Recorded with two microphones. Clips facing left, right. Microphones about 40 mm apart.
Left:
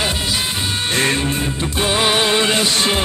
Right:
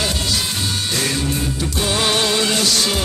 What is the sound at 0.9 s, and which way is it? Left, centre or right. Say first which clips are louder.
Music: left 5 dB; left.